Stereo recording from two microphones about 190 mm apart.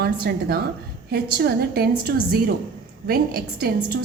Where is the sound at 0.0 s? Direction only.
55° right (ahead or behind).